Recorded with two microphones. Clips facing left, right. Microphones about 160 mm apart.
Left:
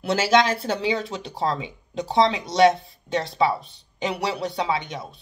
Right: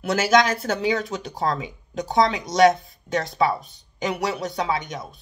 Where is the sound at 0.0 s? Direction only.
30° left (ahead or behind).